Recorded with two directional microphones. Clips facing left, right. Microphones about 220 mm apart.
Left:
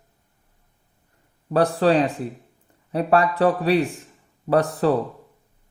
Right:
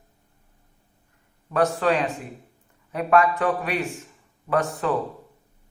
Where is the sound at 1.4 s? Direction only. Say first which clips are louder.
Left 3 dB; 35° left (ahead or behind).